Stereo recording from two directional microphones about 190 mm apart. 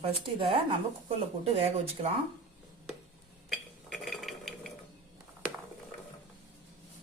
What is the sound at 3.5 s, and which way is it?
Dishes, centre (ahead or behind).